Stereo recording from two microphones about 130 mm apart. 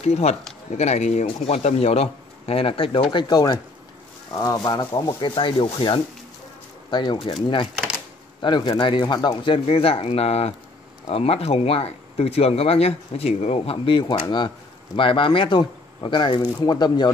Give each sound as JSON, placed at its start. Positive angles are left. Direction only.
{"t": 0.0, "sound": "speech", "side_deg": 55}
{"t": 8.4, "sound": "speech", "side_deg": 40}